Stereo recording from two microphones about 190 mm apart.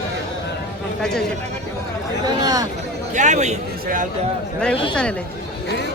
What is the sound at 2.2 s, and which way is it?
Speech, 20° right (ahead or behind).